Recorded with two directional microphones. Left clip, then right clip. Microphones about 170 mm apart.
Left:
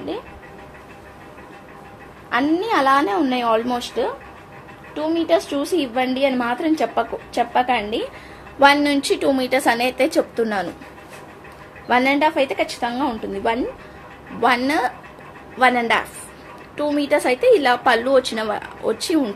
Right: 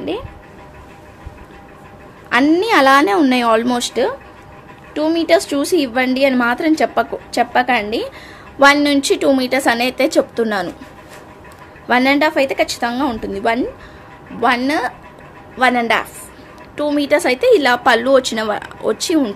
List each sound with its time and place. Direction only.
2.2 s a woman's voice: 50° right (ahead or behind); by 10.7 s 25° right (ahead or behind)
11.9 s a woman's voice: 25° right (ahead or behind)
14.4 s a woman's voice: 15° right (ahead or behind)